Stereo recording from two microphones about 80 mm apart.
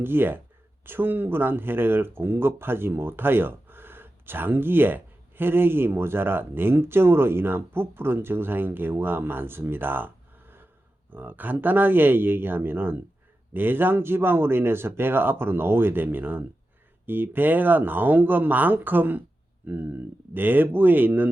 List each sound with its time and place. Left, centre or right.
0.0 s speech: right